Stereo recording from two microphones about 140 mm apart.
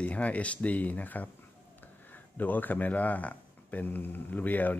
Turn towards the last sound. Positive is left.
turn(degrees=10)  # may be behind; listen again after turning